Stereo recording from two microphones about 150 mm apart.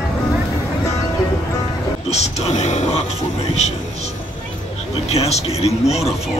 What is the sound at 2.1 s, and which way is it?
Music, 50° left (ahead or behind).